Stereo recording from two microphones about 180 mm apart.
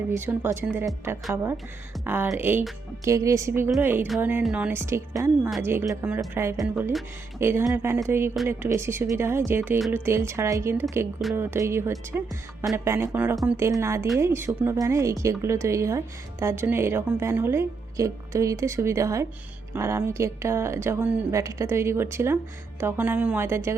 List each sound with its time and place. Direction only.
0.1 s speech: 10° right (ahead or behind)